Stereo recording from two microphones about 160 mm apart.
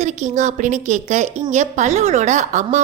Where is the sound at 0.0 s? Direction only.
50° right (ahead or behind).